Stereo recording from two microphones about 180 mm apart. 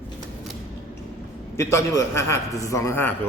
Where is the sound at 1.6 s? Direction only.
15° left (ahead or behind).